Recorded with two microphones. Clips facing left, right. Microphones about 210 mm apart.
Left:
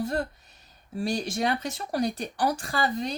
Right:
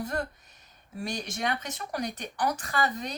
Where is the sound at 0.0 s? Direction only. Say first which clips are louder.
Left 4 dB; 30° left (ahead or behind).